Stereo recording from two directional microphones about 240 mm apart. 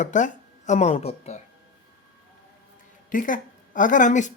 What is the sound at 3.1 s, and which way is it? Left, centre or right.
A woman's voice, left.